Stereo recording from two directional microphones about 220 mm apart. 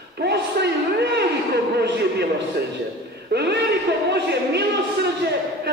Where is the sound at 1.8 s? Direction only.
50° right (ahead or behind).